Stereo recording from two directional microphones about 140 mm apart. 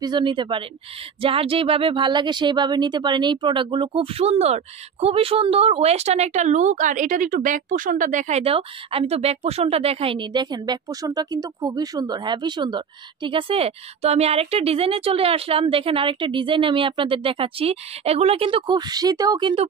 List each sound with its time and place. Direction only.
0.0 s speech: 35° right (ahead or behind); by 8.4 s 65° right (ahead or behind)
8.4 s speech: 45° right (ahead or behind)